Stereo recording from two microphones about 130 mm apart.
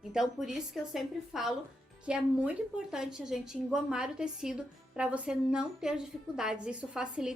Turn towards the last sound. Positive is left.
turn(degrees=-5)  # may be behind; listen again after turning